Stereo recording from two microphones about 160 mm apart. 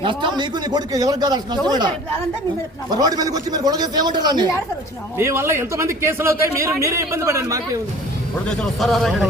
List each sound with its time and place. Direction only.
0.0 s a man's voice: 30° right (ahead or behind)
2.9 s a man's voice: 25° right (ahead or behind)
5.1 s a man's voice: 15° right (ahead or behind)
8.4 s speech: 5° left (ahead or behind)